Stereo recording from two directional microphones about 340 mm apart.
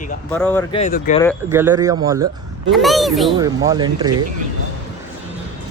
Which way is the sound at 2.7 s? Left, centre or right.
Centre.